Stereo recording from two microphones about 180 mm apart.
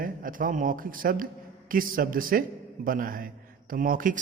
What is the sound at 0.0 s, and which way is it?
A man's voice, 50° right (ahead or behind).